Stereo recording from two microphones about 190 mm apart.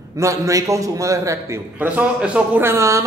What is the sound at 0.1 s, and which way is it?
A man's voice, 15° right (ahead or behind).